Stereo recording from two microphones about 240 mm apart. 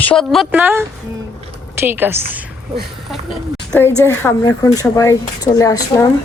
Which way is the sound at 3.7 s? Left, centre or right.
Centre.